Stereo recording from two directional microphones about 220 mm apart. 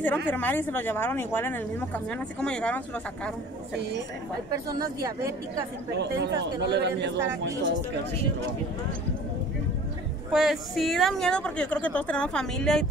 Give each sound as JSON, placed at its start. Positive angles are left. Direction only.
{"t": 0.3, "sound": "speech", "side_deg": 10}
{"t": 4.7, "sound": "speech", "side_deg": -15}
{"t": 5.9, "sound": "speech", "side_deg": -50}
{"t": 10.3, "sound": "a woman's voice", "side_deg": 0}